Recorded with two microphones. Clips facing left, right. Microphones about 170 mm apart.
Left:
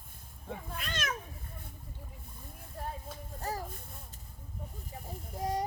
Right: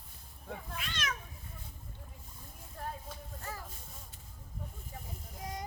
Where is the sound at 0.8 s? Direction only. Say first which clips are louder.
Left 3 dB; 45° left (ahead or behind).